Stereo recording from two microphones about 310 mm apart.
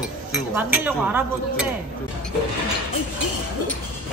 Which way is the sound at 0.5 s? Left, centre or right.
Centre.